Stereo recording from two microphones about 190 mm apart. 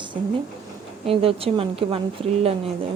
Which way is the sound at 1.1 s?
30° right (ahead or behind).